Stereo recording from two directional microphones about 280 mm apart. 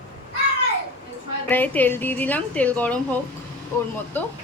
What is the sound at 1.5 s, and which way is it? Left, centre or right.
A woman's voice, centre.